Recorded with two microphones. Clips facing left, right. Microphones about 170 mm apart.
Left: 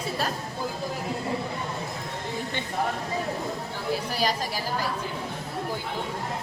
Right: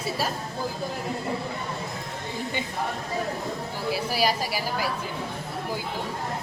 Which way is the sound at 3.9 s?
10° right (ahead or behind).